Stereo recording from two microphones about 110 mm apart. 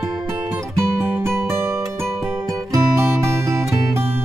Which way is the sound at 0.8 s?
25° right (ahead or behind).